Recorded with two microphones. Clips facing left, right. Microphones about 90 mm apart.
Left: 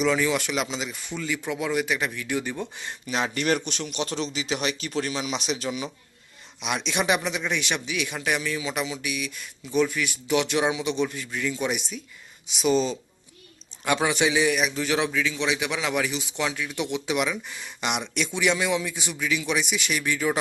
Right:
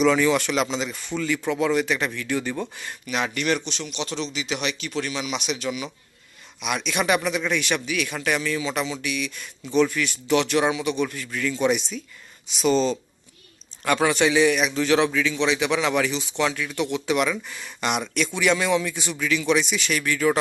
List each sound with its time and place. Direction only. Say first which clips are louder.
0.0 s a man's voice: right 4 dB; 5° left (ahead or behind)